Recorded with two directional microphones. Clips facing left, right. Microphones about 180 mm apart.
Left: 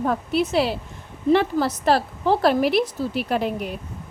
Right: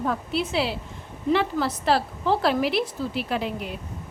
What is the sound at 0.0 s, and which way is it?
A woman's voice, 45° left (ahead or behind).